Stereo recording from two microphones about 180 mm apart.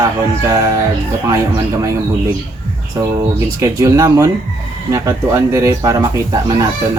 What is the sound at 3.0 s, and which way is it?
Speech, 20° right (ahead or behind).